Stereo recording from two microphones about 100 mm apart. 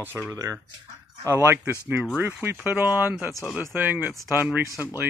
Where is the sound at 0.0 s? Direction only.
20° right (ahead or behind).